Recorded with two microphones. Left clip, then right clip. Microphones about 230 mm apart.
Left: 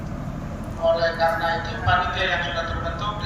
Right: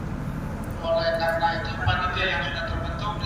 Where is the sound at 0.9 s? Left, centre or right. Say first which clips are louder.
Left 2 dB; left.